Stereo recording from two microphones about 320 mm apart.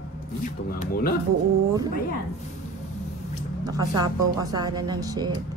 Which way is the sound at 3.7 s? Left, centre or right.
Centre.